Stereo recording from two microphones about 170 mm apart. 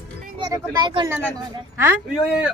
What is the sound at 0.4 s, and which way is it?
Speech, 25° right (ahead or behind).